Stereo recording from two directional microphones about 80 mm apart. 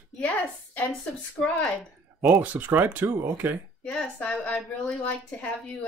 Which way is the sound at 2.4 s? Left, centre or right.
Right.